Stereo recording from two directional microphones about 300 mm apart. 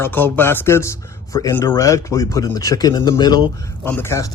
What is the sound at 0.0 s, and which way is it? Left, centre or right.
Speech, centre.